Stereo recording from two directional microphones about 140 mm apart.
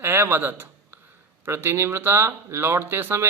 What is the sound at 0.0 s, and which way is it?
Speech, 15° right (ahead or behind).